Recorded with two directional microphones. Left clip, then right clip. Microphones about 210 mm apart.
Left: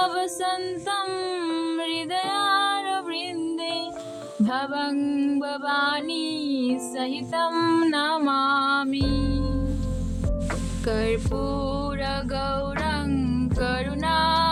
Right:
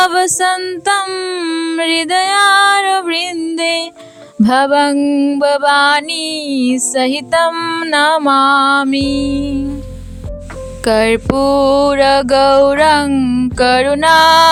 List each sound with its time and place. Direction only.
0.0 s music: 50° right (ahead or behind)
10.8 s music: 55° right (ahead or behind)